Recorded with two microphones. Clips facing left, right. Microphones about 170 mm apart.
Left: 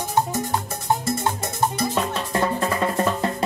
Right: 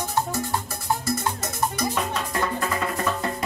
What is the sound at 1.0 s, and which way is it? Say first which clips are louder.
Music: left 2 dB; 25° left (ahead or behind).